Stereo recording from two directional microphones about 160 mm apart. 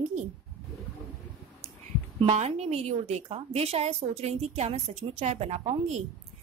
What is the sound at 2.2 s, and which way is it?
A woman's voice, 45° right (ahead or behind).